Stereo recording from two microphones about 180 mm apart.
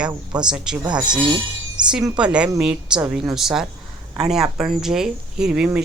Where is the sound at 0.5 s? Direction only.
5° right (ahead or behind).